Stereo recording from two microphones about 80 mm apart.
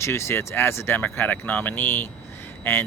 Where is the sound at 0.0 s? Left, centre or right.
Left.